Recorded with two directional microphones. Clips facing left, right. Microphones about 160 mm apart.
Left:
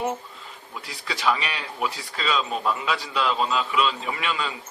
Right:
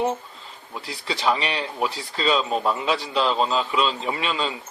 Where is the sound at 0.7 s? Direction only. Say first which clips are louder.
Right 4 dB; 30° right (ahead or behind).